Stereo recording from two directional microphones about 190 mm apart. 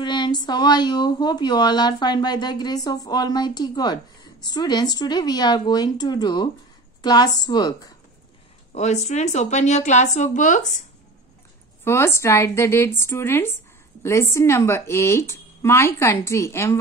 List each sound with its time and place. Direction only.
0.0 s speech: 25° left (ahead or behind)
8.7 s speech: 35° left (ahead or behind)
11.8 s a woman's voice: 15° left (ahead or behind)